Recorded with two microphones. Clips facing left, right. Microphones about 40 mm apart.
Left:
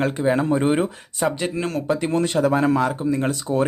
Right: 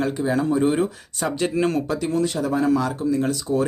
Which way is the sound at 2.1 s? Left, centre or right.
Left.